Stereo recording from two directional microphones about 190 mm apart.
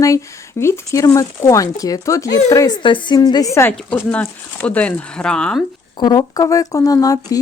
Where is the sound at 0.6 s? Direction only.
15° left (ahead or behind).